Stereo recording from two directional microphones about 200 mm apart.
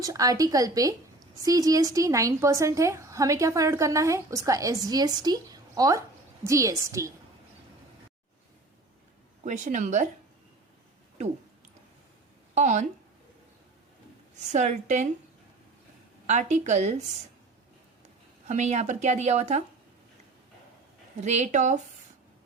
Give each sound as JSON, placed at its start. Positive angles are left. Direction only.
{"t": 0.0, "sound": "a woman's voice", "side_deg": -15}
{"t": 9.4, "sound": "a woman's voice", "side_deg": -40}
{"t": 12.5, "sound": "speech", "side_deg": -35}
{"t": 14.3, "sound": "a woman's voice", "side_deg": -35}
{"t": 16.2, "sound": "a woman's voice", "side_deg": -35}
{"t": 18.4, "sound": "a woman's voice", "side_deg": -35}
{"t": 21.2, "sound": "a woman's voice", "side_deg": -35}